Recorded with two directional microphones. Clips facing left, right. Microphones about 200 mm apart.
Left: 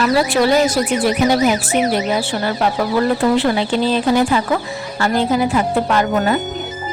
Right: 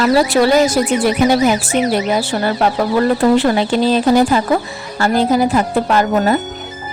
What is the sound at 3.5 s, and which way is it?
Speech, 40° right (ahead or behind).